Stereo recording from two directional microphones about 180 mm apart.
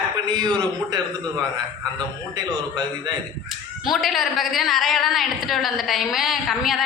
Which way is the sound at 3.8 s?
Centre (ahead or behind).